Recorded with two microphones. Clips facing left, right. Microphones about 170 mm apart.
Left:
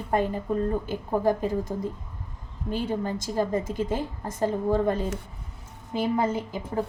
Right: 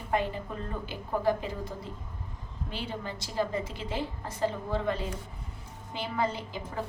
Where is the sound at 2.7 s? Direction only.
45° left (ahead or behind).